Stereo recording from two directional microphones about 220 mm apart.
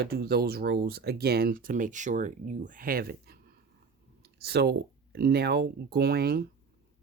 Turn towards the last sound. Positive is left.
turn(degrees=-45)  # may be behind; listen again after turning